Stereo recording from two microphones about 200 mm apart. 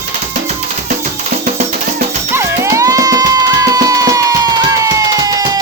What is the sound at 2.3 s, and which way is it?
Music, 15° right (ahead or behind).